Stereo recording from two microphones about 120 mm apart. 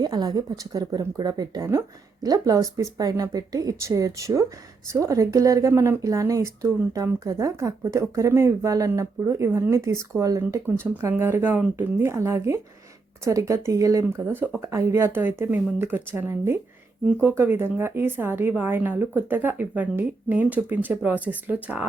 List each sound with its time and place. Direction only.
0.0 s a woman's voice: 35° right (ahead or behind); by 21.8 s 15° right (ahead or behind)